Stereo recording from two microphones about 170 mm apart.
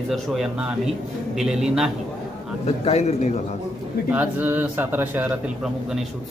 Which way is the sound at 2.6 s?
40° left (ahead or behind).